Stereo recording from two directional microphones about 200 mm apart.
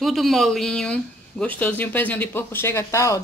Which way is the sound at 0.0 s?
Centre (ahead or behind).